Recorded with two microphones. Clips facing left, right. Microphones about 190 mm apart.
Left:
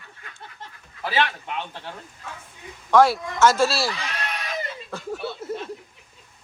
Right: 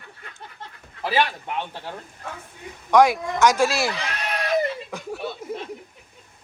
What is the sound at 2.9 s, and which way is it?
Speech, 15° right (ahead or behind).